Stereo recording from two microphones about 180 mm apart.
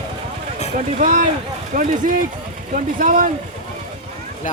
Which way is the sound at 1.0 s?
45° right (ahead or behind).